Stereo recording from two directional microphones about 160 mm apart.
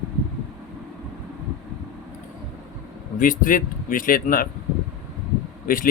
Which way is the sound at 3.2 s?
60° left (ahead or behind).